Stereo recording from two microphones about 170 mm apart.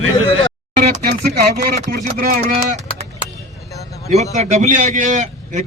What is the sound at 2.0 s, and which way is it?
Speech, 55° right (ahead or behind).